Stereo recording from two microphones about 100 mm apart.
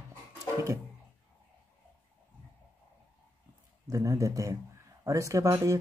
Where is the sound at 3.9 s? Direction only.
35° right (ahead or behind).